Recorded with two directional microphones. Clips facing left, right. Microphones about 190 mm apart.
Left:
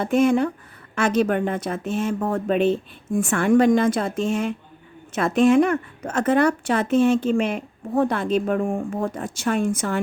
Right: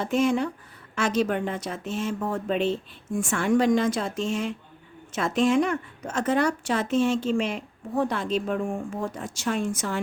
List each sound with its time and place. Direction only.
0.0 s a woman's voice: 55° left (ahead or behind)